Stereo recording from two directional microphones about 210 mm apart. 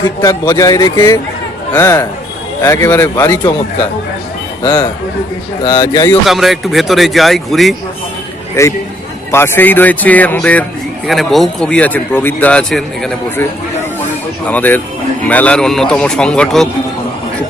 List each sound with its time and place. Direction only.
0.2 s speech: 15° left (ahead or behind)
4.6 s speech: 20° left (ahead or behind)
6.2 s a man's voice: centre (ahead or behind)
8.6 s a man's voice: 15° left (ahead or behind)